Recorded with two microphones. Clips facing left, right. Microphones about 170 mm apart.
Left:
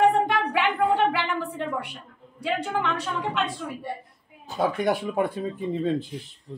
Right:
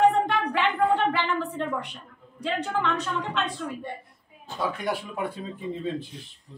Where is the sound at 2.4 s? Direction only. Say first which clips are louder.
Left 1 dB; 10° left (ahead or behind).